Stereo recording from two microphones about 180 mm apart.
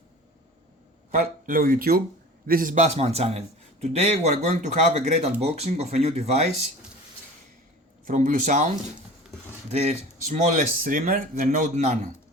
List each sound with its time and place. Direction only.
1.1 s a man's voice: 50° right (ahead or behind)
8.0 s speech: 45° right (ahead or behind)
9.6 s speech: 40° right (ahead or behind)